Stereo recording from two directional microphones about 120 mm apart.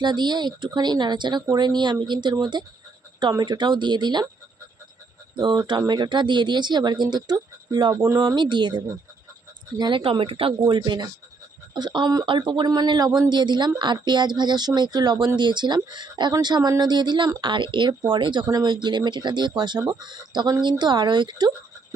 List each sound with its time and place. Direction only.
0.0 s speech: 40° right (ahead or behind)
5.4 s speech: 40° right (ahead or behind)
8.0 s speech: 25° right (ahead or behind)
8.4 s speech: 40° right (ahead or behind)
10.0 s a woman's voice: 50° right (ahead or behind)
10.7 s speech: 35° right (ahead or behind)